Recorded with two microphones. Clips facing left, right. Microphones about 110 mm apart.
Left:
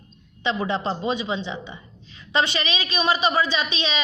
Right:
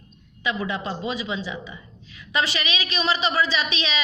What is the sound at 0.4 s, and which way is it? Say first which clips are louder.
A woman's voice: left 3 dB; 30° left (ahead or behind).